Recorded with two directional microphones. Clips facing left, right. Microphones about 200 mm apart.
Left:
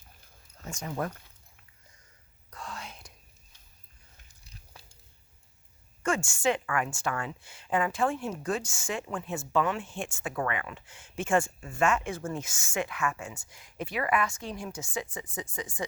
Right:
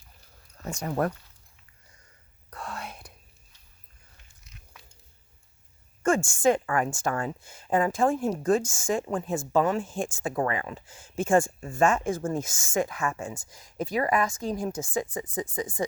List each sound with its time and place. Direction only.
0.6 s speech: 65° right (ahead or behind)
2.5 s whispering: 60° right (ahead or behind)
4.4 s a sound: 35° left (ahead or behind)
6.1 s a woman's voice: 50° right (ahead or behind)
6.7 s speech: 35° right (ahead or behind)
12.4 s a woman's voice: 45° right (ahead or behind)